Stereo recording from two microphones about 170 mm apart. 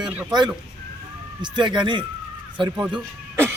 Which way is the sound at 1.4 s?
25° right (ahead or behind).